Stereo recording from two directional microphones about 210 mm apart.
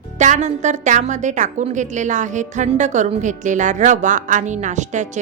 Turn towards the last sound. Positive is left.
turn(degrees=-35)  # may be behind; listen again after turning